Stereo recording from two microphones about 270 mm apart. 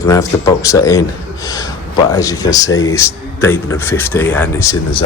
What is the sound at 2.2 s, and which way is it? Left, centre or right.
Speech, centre.